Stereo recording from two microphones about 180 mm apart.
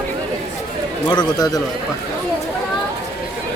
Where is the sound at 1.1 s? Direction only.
25° left (ahead or behind).